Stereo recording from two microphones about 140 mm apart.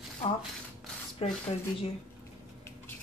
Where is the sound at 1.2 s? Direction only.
40° left (ahead or behind).